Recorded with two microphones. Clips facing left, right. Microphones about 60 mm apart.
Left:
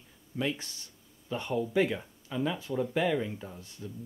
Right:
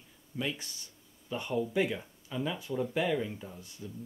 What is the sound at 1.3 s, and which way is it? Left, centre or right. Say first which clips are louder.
Speech: left 2 dB; centre.